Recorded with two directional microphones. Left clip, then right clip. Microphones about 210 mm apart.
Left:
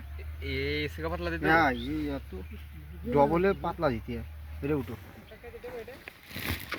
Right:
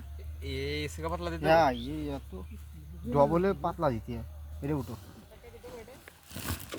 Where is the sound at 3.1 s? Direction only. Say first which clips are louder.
Left 1 dB; 35° right (ahead or behind).